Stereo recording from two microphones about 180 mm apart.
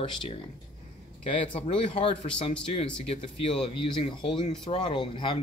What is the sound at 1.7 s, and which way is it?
Speech, 30° left (ahead or behind).